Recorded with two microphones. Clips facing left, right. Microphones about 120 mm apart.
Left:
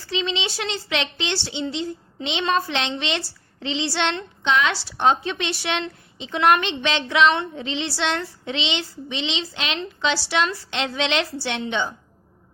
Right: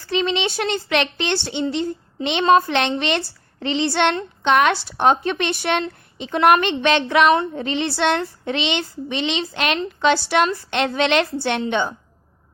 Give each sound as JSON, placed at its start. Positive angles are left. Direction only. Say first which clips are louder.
{"t": 0.1, "sound": "a woman's voice", "louder": "right 5 dB", "side_deg": -55}